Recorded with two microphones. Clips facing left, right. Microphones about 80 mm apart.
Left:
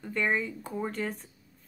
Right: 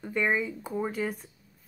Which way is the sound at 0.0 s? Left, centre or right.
Centre.